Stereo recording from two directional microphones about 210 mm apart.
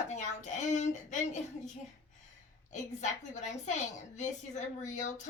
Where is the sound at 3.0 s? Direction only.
35° left (ahead or behind).